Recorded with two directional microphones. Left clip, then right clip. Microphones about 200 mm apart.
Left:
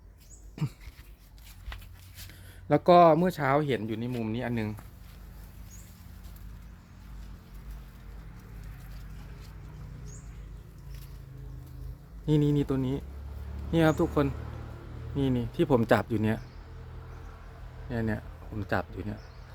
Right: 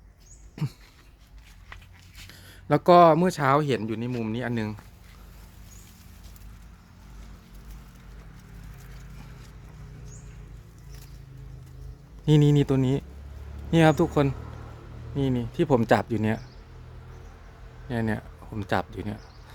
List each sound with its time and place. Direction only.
0.6 s speech: 10° right (ahead or behind)
2.6 s speech: 20° right (ahead or behind)
12.2 s speech: 35° right (ahead or behind)
15.1 s speech: 10° right (ahead or behind)
17.8 s speech: 25° right (ahead or behind)